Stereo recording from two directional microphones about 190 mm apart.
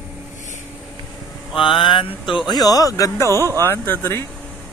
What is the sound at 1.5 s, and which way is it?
Speech, 25° left (ahead or behind).